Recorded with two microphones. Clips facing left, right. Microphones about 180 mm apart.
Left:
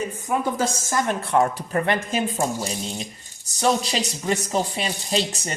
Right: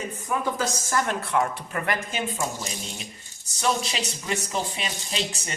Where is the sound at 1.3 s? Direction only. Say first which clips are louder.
Left 5 dB; 35° left (ahead or behind).